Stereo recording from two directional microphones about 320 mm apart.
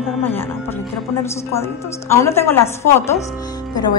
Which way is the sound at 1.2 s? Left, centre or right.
Centre.